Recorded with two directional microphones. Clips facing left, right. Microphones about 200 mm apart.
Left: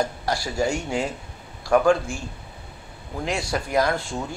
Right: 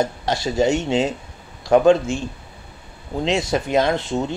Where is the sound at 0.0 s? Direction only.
20° right (ahead or behind).